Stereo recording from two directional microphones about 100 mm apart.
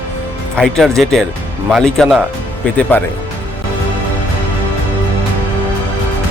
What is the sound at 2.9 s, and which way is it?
Speech, 20° left (ahead or behind).